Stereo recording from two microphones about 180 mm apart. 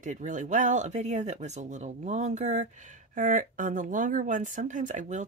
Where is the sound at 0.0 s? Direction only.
45° right (ahead or behind).